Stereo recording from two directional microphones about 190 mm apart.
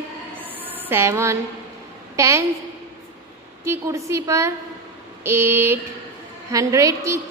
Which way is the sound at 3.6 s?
15° right (ahead or behind).